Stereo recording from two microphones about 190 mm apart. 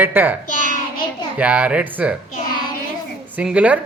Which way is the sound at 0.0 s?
10° right (ahead or behind).